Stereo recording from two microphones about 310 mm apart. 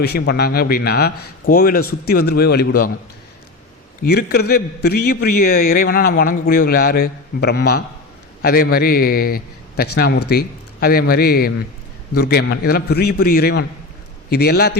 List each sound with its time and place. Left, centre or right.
0.0 s a man's voice: left
4.0 s a man's voice: left